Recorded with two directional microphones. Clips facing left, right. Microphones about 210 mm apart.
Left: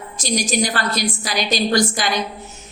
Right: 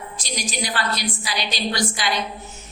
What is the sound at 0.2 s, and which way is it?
A woman's voice, 45° left (ahead or behind).